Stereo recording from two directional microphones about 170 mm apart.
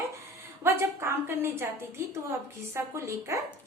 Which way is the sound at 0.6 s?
15° right (ahead or behind).